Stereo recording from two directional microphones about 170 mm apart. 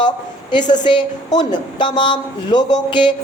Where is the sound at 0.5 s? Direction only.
25° left (ahead or behind).